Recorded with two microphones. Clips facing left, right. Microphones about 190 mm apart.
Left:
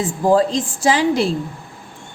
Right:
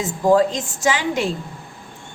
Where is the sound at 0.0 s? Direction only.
30° left (ahead or behind).